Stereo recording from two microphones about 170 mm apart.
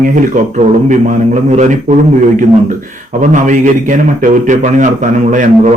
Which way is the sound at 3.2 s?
45° right (ahead or behind).